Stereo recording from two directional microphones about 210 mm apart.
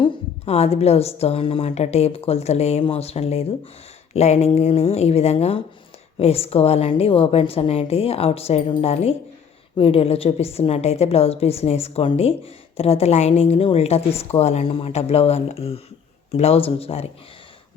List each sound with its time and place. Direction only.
0.0 s a woman's voice: 25° left (ahead or behind)